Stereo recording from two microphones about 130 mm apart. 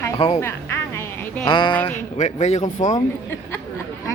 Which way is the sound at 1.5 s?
35° left (ahead or behind).